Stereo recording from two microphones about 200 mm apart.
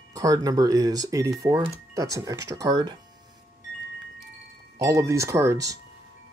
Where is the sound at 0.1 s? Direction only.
15° right (ahead or behind).